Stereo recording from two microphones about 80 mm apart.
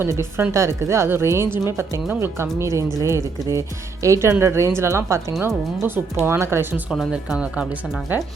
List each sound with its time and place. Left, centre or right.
0.0 s speech: right
7.1 s speech: centre